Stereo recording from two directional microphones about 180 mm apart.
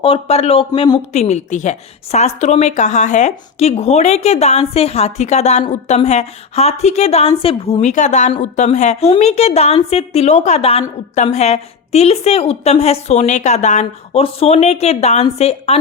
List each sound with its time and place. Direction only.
0.0 s a woman's voice: 35° left (ahead or behind)